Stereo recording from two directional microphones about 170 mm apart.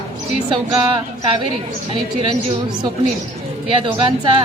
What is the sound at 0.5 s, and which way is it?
Speech, 30° right (ahead or behind).